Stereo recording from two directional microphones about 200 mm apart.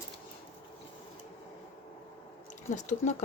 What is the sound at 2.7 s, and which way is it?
Speech, 35° left (ahead or behind).